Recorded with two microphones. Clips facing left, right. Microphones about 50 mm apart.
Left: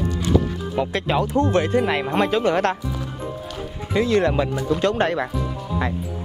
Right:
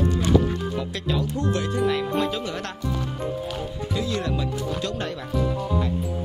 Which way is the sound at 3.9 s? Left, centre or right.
Left.